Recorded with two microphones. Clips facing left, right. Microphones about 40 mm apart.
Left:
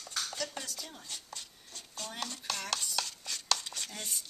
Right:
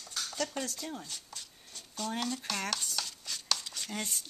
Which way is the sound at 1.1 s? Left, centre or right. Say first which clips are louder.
Left 1 dB; centre.